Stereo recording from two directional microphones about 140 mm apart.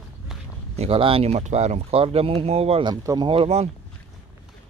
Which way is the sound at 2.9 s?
25° right (ahead or behind).